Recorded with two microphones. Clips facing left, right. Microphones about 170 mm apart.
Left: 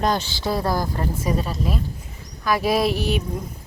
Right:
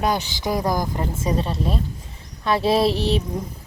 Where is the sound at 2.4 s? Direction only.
25° right (ahead or behind).